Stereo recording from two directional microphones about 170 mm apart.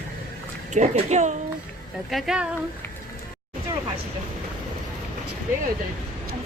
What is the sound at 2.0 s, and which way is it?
Speech, centre (ahead or behind).